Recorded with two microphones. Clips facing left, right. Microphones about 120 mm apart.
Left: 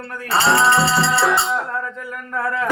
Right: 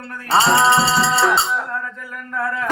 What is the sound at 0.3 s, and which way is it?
Music, 20° right (ahead or behind).